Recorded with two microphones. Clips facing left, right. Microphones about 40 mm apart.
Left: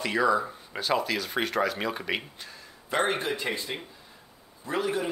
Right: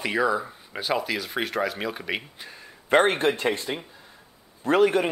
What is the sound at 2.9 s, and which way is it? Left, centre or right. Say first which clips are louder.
Speech: right 7 dB; right.